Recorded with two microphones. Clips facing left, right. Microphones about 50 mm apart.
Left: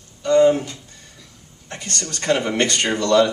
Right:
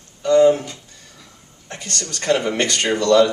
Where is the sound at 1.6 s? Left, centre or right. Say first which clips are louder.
Even; left.